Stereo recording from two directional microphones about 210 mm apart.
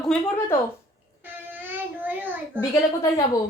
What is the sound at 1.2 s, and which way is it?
Child singing, 10° right (ahead or behind).